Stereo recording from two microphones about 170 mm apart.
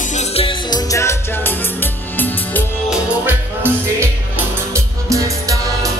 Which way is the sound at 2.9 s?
10° right (ahead or behind).